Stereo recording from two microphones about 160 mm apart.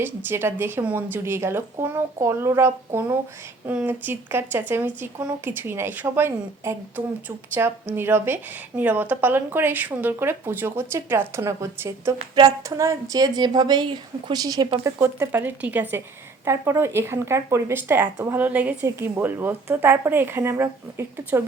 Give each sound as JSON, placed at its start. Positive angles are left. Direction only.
{"t": 0.0, "sound": "speech", "side_deg": -15}